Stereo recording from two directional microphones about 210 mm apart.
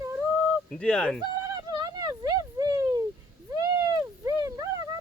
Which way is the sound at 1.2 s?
20° right (ahead or behind).